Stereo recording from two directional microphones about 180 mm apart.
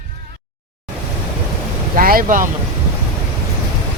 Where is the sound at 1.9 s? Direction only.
50° right (ahead or behind).